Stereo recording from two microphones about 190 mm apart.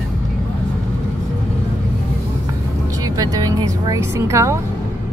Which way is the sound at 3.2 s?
20° right (ahead or behind).